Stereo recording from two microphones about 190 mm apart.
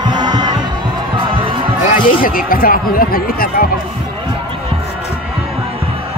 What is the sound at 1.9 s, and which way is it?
Speech, 45° left (ahead or behind).